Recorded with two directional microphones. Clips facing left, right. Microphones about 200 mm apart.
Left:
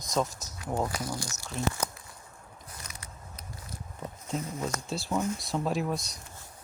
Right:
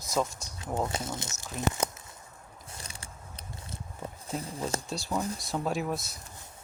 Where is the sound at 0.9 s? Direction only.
25° right (ahead or behind).